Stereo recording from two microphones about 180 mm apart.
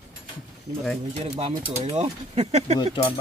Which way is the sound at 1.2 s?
35° right (ahead or behind).